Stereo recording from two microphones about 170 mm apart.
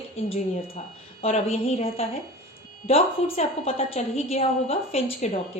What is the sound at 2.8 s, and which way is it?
A woman's voice, 40° left (ahead or behind).